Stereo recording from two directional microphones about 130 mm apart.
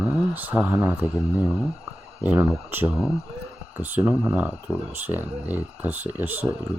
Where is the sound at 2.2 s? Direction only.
15° right (ahead or behind).